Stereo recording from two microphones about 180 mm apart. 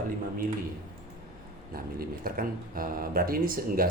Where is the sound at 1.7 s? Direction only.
55° right (ahead or behind).